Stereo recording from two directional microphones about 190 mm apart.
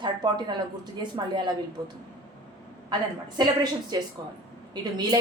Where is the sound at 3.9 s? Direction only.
20° right (ahead or behind).